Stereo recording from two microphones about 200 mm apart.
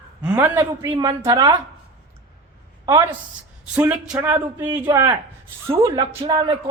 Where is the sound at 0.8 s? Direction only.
25° right (ahead or behind).